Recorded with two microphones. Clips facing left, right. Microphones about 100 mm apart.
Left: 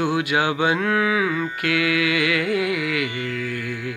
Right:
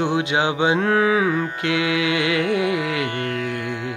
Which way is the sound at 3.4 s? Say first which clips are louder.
Right 2 dB; 25° right (ahead or behind).